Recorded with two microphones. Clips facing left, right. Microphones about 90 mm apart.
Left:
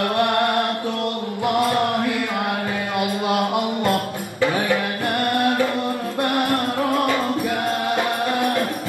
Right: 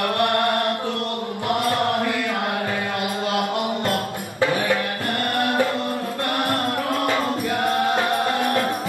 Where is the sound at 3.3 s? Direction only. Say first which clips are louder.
Left 2 dB; 20° left (ahead or behind).